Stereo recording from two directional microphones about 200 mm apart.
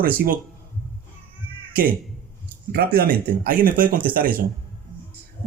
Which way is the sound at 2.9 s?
45° right (ahead or behind).